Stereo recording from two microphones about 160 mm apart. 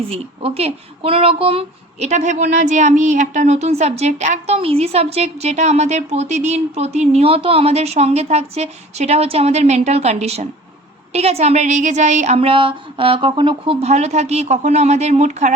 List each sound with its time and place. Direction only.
0.1 s speech: 40° right (ahead or behind)